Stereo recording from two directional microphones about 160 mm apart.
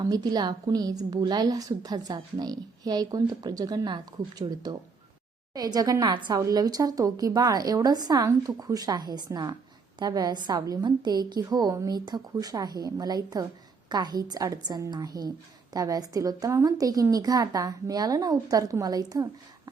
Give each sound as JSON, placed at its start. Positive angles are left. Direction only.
{"t": 0.0, "sound": "a woman's voice", "side_deg": -25}